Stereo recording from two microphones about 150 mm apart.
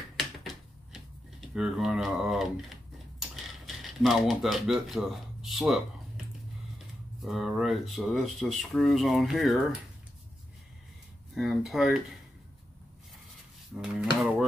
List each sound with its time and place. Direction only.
1.5 s speech: 5° right (ahead or behind)
3.2 s a sound: centre (ahead or behind)
7.2 s speech: centre (ahead or behind)
11.3 s speech: centre (ahead or behind)
13.7 s speech: 5° right (ahead or behind)